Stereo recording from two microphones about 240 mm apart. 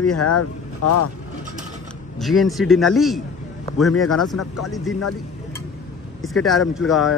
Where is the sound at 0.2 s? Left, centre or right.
Left.